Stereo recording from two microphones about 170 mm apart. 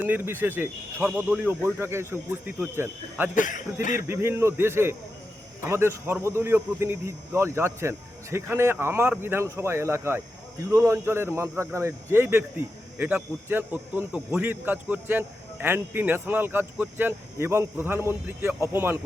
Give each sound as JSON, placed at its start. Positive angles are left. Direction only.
{"t": 0.0, "sound": "speech", "side_deg": -10}
{"t": 3.3, "sound": "a man's voice", "side_deg": 50}
{"t": 4.1, "sound": "speech", "side_deg": -15}